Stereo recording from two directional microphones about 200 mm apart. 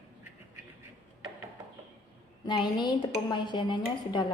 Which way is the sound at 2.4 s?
20° left (ahead or behind).